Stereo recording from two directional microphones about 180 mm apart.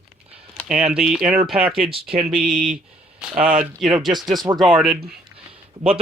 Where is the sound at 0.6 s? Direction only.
5° right (ahead or behind).